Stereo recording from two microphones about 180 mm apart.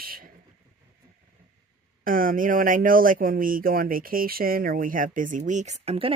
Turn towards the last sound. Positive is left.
turn(degrees=-35)  # may be behind; listen again after turning